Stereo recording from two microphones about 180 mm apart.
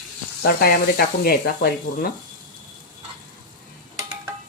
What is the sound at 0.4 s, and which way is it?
Speech, 55° left (ahead or behind).